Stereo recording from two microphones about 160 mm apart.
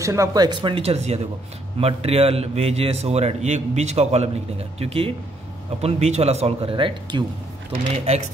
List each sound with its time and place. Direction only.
0.0 s a man's voice: 20° right (ahead or behind)